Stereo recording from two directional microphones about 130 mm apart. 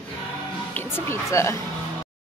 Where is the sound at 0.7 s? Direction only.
20° left (ahead or behind).